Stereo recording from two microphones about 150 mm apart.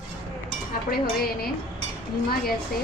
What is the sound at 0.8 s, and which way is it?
Dishes, 80° left.